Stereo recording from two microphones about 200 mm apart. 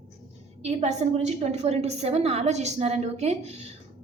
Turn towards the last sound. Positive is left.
turn(degrees=-35)  # may be behind; listen again after turning